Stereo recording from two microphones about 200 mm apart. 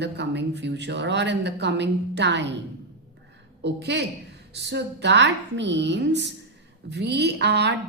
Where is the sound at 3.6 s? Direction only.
60° right (ahead or behind).